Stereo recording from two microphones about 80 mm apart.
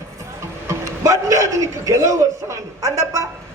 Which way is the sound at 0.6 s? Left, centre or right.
Right.